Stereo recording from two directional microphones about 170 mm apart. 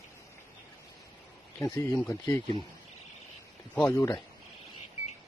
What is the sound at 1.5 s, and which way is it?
Speech, 15° left (ahead or behind).